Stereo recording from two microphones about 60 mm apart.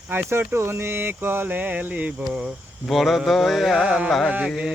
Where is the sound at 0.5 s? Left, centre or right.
Right.